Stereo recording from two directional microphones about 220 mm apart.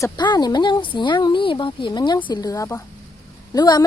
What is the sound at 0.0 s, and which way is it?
A woman's voice, 20° left (ahead or behind).